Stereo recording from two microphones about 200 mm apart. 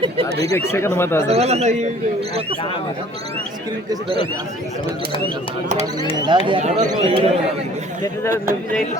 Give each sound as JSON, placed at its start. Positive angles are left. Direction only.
{"t": 0.4, "sound": "speech", "side_deg": 15}
{"t": 1.3, "sound": "a man's voice", "side_deg": -30}
{"t": 6.2, "sound": "speech", "side_deg": -25}